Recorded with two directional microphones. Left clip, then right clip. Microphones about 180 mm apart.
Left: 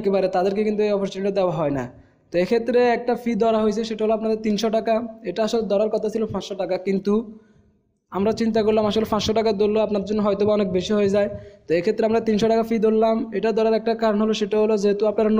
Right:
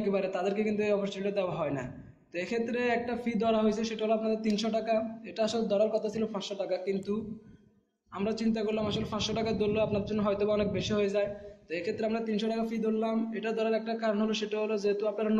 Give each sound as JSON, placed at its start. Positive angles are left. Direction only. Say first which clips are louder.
{"t": 0.0, "sound": "a man's voice", "louder": "left 10 dB", "side_deg": 45}